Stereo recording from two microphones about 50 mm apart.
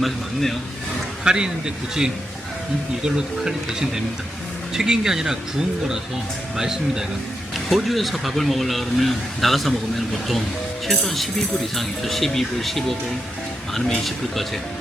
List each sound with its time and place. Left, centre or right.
1.2 s speech: centre
3.2 s speech: centre
7.7 s speech: centre
10.9 s speech: centre